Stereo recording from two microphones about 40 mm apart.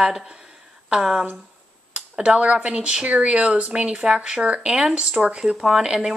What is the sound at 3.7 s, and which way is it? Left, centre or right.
Speech, right.